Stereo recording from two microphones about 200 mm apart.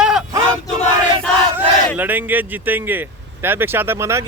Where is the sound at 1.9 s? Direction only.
10° right (ahead or behind).